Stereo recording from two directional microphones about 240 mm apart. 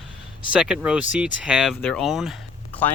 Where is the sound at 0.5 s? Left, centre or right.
Centre.